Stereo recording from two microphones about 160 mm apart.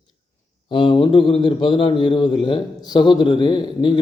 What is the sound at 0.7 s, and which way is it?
A man's voice, 30° left (ahead or behind).